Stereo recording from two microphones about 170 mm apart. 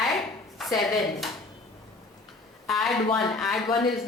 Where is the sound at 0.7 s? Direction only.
20° left (ahead or behind).